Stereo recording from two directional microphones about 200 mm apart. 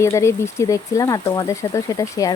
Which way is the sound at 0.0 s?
15° left (ahead or behind).